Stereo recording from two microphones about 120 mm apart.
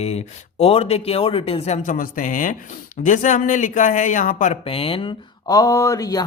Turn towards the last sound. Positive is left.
turn(degrees=30)  # may be behind; listen again after turning